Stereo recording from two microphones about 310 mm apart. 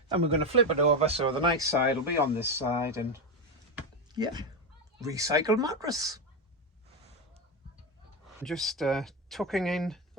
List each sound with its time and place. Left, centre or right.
0.3 s speech: centre
3.8 s a sound: centre
4.9 s speech: centre
8.4 s speech: centre